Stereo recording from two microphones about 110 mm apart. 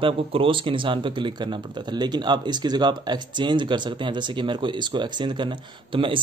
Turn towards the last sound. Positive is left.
turn(degrees=-50)  # may be behind; listen again after turning